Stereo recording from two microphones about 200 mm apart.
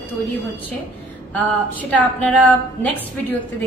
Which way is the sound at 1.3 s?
5° left (ahead or behind).